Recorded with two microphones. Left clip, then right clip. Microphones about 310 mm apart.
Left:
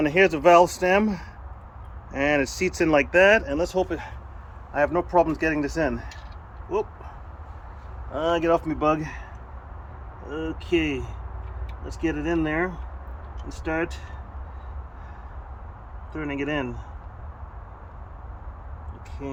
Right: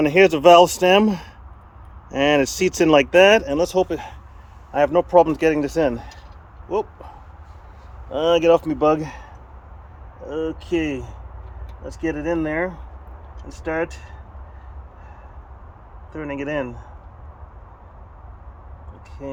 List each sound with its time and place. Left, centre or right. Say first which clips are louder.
0.0 s speech: right 5 dB; right
8.1 s speech: right 6 dB; right
10.2 s speech: right 4 dB; centre
16.1 s speech: right 2 dB; centre